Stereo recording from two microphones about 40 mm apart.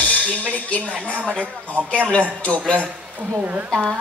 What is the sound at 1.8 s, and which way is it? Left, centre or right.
Speech, left.